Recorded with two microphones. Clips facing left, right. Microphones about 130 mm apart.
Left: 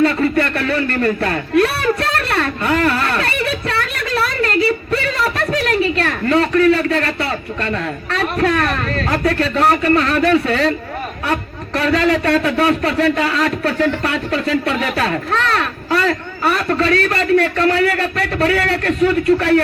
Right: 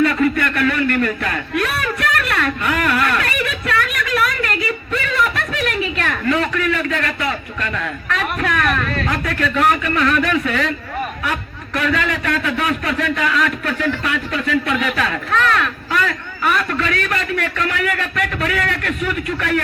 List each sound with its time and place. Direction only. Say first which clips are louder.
0.0 s a sound: left 1 dB; 30° left (ahead or behind)
8.1 s a man's voice: left 4 dB; 35° left (ahead or behind)
11.8 s a man's voice: left 5 dB; 35° left (ahead or behind)